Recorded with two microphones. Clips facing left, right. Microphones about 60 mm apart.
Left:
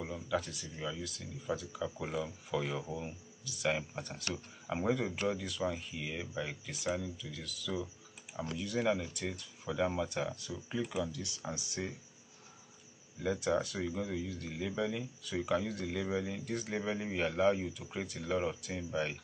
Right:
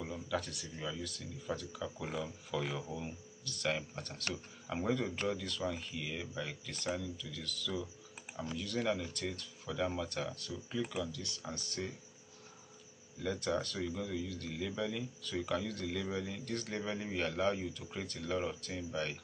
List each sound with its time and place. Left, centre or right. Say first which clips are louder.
0.0 s speech: left 2 dB; centre
13.2 s speech: left 3 dB; centre